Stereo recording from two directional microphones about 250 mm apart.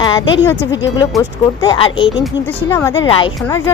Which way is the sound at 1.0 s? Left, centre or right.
Centre.